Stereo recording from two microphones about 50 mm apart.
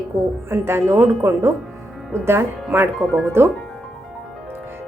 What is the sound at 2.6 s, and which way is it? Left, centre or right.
Speech, right.